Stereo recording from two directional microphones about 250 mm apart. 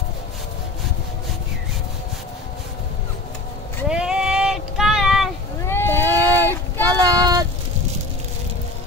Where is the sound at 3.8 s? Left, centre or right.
Centre.